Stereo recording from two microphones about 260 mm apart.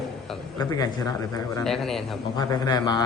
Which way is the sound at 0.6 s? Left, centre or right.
Centre.